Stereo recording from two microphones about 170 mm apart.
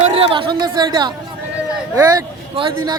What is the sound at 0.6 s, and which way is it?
Speech, 25° right (ahead or behind).